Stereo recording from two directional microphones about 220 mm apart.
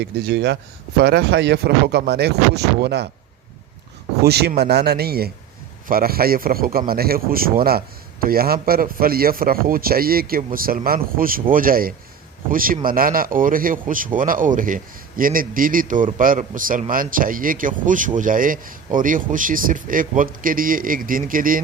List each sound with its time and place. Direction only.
0.0 s speech: 50° right (ahead or behind)
4.2 s speech: 45° right (ahead or behind)